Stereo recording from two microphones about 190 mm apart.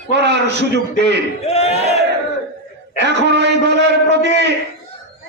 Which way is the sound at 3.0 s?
65° right (ahead or behind).